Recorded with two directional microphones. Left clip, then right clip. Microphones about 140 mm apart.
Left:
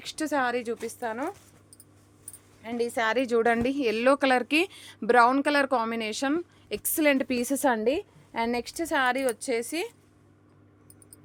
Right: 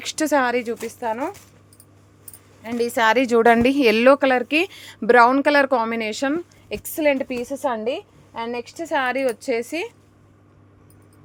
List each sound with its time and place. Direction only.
0.0 s a woman's voice: 20° right (ahead or behind); by 1.4 s 10° left (ahead or behind)
2.6 s speech: 5° right (ahead or behind); by 4.0 s 25° right (ahead or behind)
4.2 s a woman's voice: 5° left (ahead or behind)
6.9 s a woman's voice: 35° left (ahead or behind)
7.3 s a woman's voice: 75° left (ahead or behind)
8.6 s a woman's voice: 40° left (ahead or behind)
8.9 s a woman's voice: 15° left (ahead or behind); by 9.9 s centre (ahead or behind)